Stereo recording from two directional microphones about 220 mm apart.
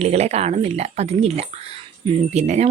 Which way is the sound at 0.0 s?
30° right (ahead or behind).